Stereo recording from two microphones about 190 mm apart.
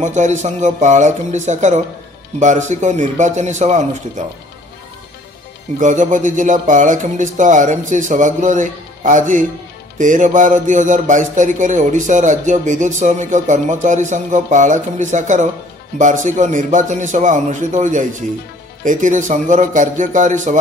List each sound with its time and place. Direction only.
0.0 s music: 40° right (ahead or behind)
5.8 s music: 40° right (ahead or behind)